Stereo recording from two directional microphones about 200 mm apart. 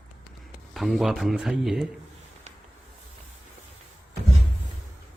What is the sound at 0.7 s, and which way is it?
Speech, centre (ahead or behind).